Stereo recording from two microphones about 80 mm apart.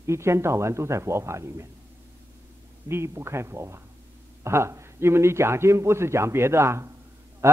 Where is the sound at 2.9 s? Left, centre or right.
Right.